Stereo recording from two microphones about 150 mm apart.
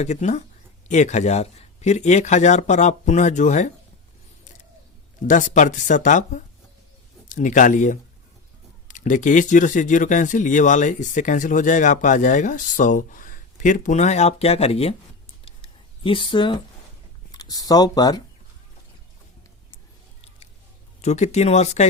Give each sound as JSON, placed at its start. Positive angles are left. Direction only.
{"t": 0.0, "sound": "speech", "side_deg": 50}
{"t": 5.3, "sound": "speech", "side_deg": 60}
{"t": 15.4, "sound": "a sound", "side_deg": 35}
{"t": 17.3, "sound": "speech", "side_deg": 25}
{"t": 21.0, "sound": "speech", "side_deg": 50}